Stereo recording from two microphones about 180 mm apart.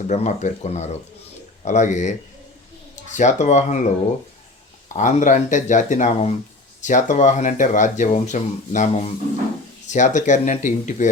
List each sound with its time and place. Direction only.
0.1 s speech: 40° left (ahead or behind)
4.9 s speech: 45° left (ahead or behind)